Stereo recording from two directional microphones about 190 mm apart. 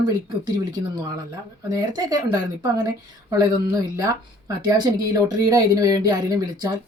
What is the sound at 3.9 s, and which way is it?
Speech, 15° right (ahead or behind).